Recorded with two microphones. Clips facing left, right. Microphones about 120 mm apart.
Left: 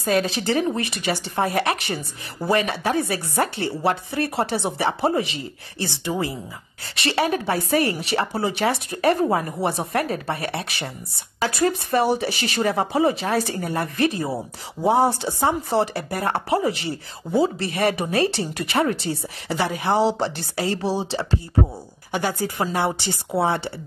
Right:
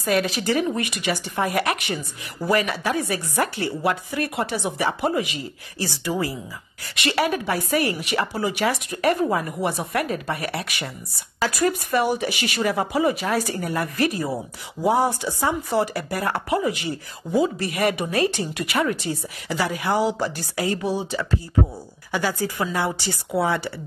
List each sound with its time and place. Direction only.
0.0 s speech: 30° left (ahead or behind)